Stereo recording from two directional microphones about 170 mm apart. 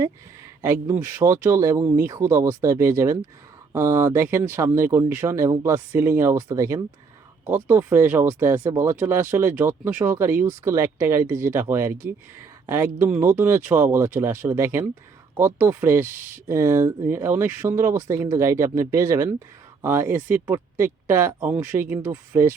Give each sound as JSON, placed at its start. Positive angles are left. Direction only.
{"t": 0.6, "sound": "speech", "side_deg": -15}